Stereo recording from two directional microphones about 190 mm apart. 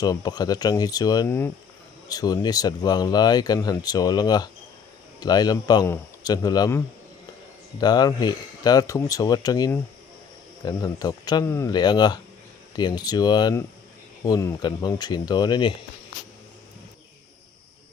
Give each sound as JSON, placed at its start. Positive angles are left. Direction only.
{"t": 0.0, "sound": "speech", "side_deg": 20}